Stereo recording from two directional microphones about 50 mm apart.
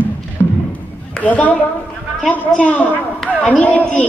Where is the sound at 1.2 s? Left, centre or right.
Left.